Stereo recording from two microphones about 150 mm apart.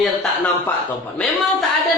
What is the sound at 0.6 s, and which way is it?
A man's voice, 10° left (ahead or behind).